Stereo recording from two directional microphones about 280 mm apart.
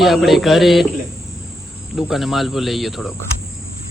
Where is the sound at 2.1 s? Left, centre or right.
Centre.